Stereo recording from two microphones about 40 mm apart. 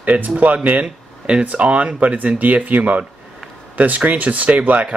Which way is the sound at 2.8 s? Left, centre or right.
Right.